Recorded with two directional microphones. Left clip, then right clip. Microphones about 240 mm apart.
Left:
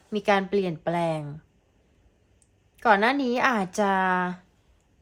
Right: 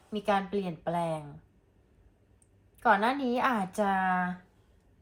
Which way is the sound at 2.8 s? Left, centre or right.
Left.